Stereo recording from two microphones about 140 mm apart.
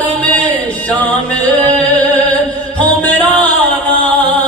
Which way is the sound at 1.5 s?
35° right (ahead or behind).